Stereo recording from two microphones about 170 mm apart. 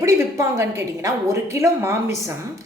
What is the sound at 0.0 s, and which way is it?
A woman's voice, 15° right (ahead or behind).